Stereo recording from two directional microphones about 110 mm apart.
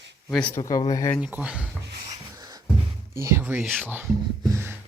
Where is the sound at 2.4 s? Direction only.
35° right (ahead or behind).